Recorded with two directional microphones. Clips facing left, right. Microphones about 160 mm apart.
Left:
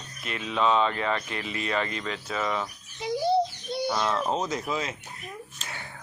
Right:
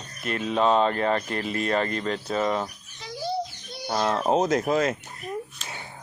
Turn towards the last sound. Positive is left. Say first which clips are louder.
# right 1 dB
turn(degrees=-20)  # may be behind; listen again after turning